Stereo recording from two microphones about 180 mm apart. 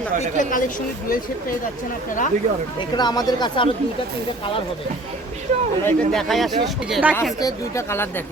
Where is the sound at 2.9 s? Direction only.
25° left (ahead or behind).